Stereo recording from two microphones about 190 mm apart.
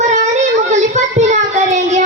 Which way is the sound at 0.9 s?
40° right (ahead or behind).